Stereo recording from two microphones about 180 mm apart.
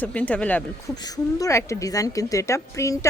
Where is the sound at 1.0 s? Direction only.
20° left (ahead or behind).